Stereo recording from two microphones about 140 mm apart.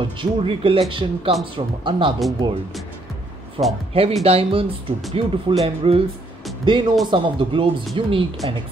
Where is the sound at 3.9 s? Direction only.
45° right (ahead or behind).